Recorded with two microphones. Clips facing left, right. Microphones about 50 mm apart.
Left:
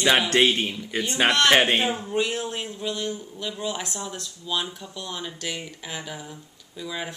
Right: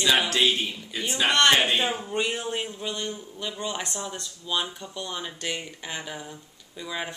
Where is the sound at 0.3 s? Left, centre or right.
Left.